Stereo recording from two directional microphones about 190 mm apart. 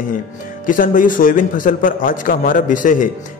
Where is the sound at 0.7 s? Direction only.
45° left (ahead or behind).